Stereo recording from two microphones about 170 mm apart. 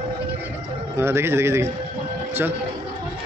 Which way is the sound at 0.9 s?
15° right (ahead or behind).